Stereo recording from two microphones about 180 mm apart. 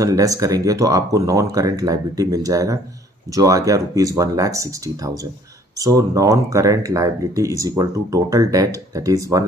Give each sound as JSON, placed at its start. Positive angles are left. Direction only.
{"t": 0.0, "sound": "speech", "side_deg": -20}